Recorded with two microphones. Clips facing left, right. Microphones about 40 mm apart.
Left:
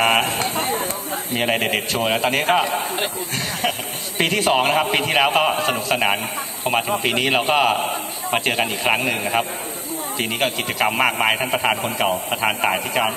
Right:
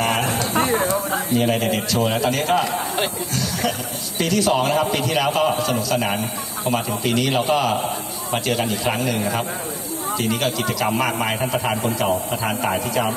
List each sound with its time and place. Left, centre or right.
0.0 s a sound: left
0.6 s chatter: right
1.3 s a man's voice: left
4.2 s a man's voice: left